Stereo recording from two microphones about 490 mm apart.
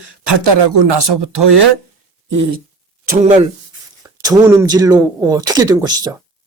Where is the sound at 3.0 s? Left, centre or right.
Centre.